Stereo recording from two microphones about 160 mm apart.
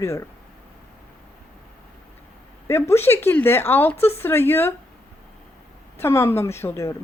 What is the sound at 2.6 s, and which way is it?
Speech, 15° left (ahead or behind).